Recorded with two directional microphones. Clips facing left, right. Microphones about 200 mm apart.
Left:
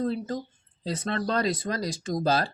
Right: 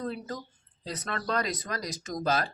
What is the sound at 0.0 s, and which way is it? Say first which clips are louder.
Speech: left 6 dB; 30° left (ahead or behind).